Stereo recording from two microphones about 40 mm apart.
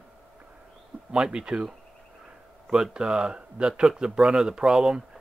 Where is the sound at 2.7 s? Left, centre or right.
Centre.